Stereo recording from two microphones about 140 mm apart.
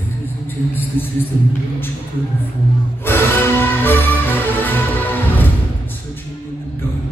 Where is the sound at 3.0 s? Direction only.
15° left (ahead or behind).